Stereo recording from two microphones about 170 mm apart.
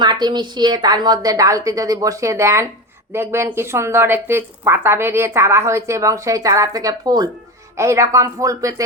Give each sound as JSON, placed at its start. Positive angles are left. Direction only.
{"t": 0.0, "sound": "a woman's voice", "side_deg": -25}